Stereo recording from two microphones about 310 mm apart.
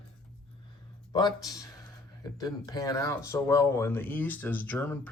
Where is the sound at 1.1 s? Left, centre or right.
Centre.